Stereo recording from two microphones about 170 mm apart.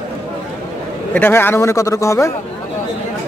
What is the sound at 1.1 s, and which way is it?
A man's voice, 10° left (ahead or behind).